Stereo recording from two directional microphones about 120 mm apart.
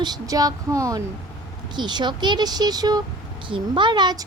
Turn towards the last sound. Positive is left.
turn(degrees=-35)  # may be behind; listen again after turning